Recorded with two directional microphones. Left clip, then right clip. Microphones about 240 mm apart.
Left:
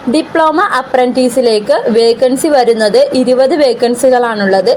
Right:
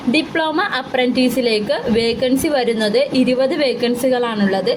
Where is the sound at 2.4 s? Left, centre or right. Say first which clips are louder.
Left 9 dB; centre.